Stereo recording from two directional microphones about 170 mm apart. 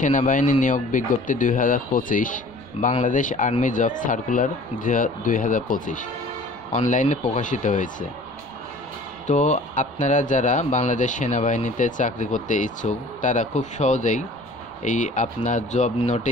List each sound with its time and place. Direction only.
0.0 s speech: 50° left (ahead or behind)
9.3 s speech: 45° left (ahead or behind)